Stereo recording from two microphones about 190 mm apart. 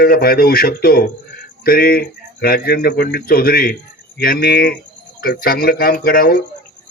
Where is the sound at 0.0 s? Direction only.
50° left (ahead or behind).